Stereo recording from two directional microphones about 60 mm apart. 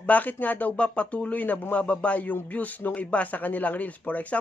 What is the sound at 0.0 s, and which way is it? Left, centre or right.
Speech, left.